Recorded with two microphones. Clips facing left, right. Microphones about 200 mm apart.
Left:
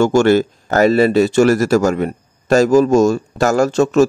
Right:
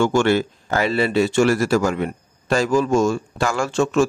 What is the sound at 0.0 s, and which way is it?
Speech, 40° left (ahead or behind).